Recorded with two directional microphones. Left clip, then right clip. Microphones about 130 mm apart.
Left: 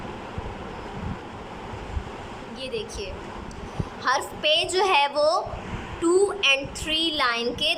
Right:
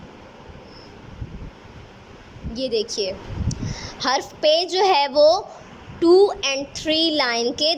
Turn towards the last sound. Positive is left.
turn(degrees=-45)  # may be behind; listen again after turning